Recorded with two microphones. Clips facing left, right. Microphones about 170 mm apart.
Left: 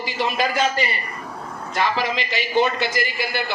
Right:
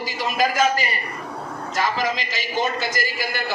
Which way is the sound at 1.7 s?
40° right (ahead or behind).